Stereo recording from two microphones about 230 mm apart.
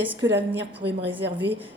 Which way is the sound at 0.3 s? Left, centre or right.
Right.